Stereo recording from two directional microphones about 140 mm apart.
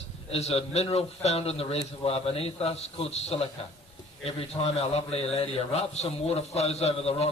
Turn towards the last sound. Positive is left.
turn(degrees=45)  # may be behind; listen again after turning